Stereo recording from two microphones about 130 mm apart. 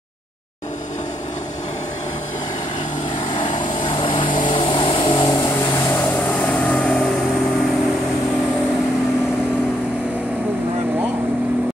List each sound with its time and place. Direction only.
3.4 s vehicle: 40° left (ahead or behind)
5.2 s vehicle: 25° left (ahead or behind)
6.4 s vehicle: 10° left (ahead or behind)